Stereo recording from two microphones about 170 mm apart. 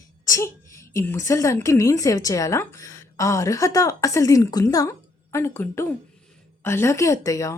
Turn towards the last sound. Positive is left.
turn(degrees=20)  # may be behind; listen again after turning